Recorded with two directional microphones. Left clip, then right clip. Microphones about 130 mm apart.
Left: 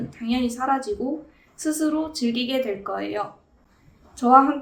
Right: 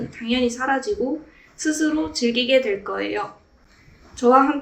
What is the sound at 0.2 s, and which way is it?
Speech, 35° left (ahead or behind).